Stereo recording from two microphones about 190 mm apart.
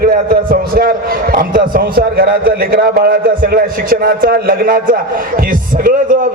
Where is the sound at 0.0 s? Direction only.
50° right (ahead or behind).